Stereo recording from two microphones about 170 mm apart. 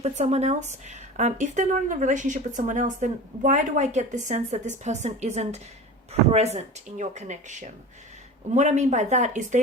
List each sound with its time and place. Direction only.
0.0 s speech: 40° right (ahead or behind)